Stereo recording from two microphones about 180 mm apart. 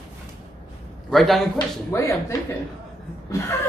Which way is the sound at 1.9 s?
15° left (ahead or behind).